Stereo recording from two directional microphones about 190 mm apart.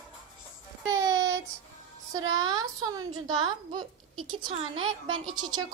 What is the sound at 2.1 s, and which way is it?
A child's voice, 20° right (ahead or behind).